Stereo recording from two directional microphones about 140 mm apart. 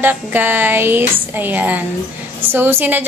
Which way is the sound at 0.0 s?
15° right (ahead or behind).